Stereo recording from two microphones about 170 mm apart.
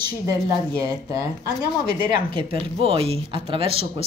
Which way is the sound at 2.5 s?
35° right (ahead or behind).